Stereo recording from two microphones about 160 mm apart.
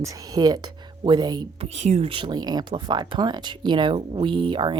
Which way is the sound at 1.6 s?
45° right (ahead or behind).